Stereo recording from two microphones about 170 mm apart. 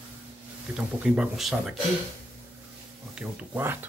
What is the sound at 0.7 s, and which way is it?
Speech, 5° right (ahead or behind).